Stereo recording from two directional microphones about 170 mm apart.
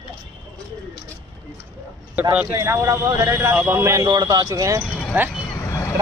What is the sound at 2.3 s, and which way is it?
A man's voice, 15° right (ahead or behind).